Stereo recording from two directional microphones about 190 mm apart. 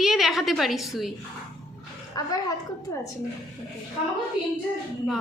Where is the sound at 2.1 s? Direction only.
20° left (ahead or behind).